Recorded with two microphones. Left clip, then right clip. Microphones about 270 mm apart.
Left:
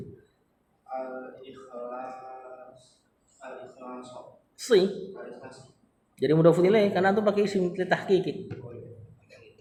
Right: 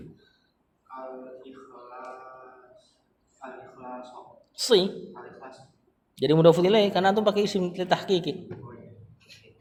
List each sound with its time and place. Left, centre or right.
4.5 s speech: right
6.1 s speech: right